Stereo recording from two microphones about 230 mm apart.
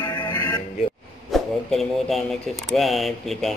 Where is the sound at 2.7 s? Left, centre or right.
Centre.